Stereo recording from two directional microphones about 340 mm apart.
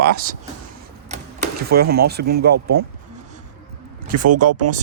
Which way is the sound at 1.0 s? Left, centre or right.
Right.